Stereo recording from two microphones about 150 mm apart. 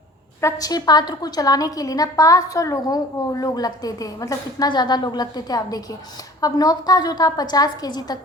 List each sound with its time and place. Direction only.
0.4 s a woman's voice: 25° left (ahead or behind)